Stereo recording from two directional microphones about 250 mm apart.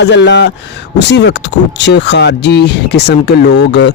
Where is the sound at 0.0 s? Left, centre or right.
Left.